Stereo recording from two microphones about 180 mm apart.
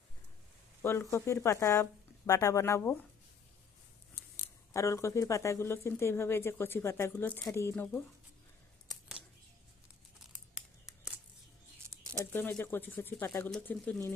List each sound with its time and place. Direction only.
0.8 s speech: 15° left (ahead or behind)
4.7 s speech: 15° left (ahead or behind)
10.5 s crumpling: 5° right (ahead or behind)
12.2 s speech: 10° left (ahead or behind)